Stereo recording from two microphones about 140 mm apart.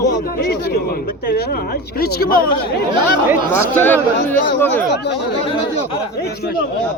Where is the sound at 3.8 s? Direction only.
15° left (ahead or behind).